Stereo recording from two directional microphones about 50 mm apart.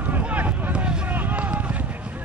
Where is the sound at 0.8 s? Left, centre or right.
Right.